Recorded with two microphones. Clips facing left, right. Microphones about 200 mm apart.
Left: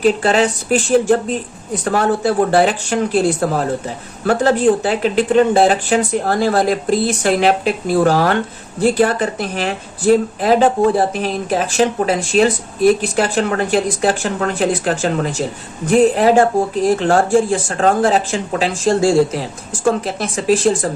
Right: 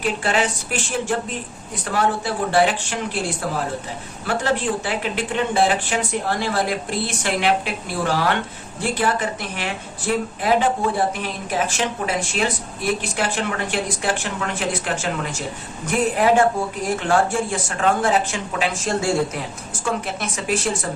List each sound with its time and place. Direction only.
0.0 s speech: 40° left (ahead or behind)